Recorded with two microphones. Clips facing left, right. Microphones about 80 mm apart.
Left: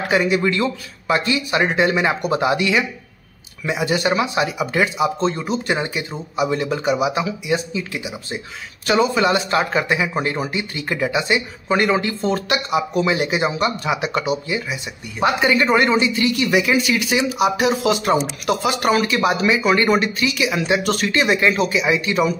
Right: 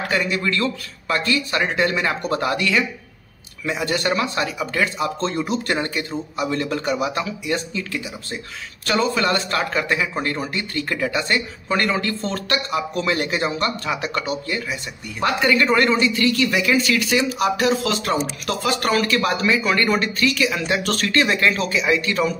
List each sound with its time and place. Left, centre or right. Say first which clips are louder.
0.1 s speech: left 5 dB; centre